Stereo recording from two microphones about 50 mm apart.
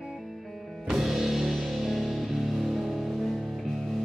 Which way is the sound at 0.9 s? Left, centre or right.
Centre.